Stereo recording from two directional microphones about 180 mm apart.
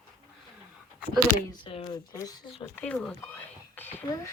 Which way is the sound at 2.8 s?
5° left (ahead or behind).